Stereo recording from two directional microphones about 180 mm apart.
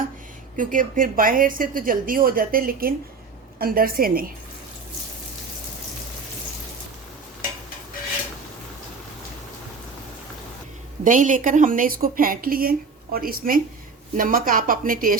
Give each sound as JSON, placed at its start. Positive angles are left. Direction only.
{"t": 0.5, "sound": "a woman's voice", "side_deg": -45}
{"t": 11.0, "sound": "a woman's voice", "side_deg": -45}